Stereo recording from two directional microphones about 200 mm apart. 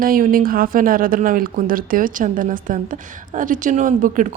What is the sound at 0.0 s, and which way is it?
Speech, 45° right (ahead or behind).